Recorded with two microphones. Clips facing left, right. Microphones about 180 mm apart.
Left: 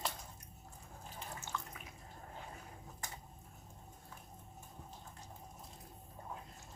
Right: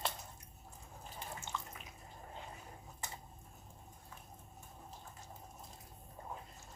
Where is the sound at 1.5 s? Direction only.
15° right (ahead or behind).